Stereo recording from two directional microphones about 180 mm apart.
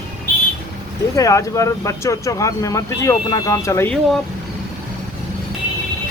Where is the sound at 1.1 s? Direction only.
20° left (ahead or behind).